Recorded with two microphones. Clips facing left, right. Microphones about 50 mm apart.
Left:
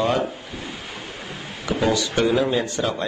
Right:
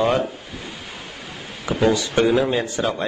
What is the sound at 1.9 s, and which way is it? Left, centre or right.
Speech, centre.